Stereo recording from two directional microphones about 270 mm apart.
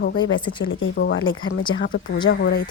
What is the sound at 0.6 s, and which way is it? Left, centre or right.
A woman's voice, left.